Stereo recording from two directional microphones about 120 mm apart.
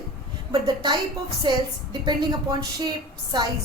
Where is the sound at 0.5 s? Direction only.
40° right (ahead or behind).